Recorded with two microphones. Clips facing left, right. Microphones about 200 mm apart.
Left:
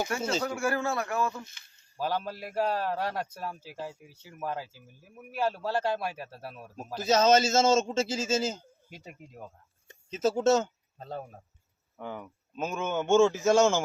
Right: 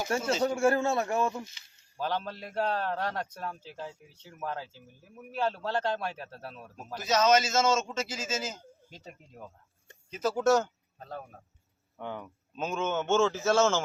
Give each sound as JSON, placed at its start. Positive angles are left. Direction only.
{"t": 0.1, "sound": "speech", "side_deg": -30}
{"t": 2.0, "sound": "a man's voice", "side_deg": 10}
{"t": 7.0, "sound": "a man's voice", "side_deg": 30}
{"t": 8.9, "sound": "a man's voice", "side_deg": 10}
{"t": 10.1, "sound": "speech", "side_deg": 25}
{"t": 11.9, "sound": "a man's voice", "side_deg": 5}